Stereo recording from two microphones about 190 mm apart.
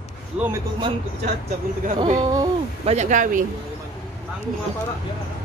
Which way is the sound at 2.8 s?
40° right (ahead or behind).